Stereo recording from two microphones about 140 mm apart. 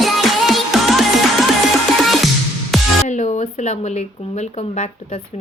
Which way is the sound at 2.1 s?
Centre (ahead or behind).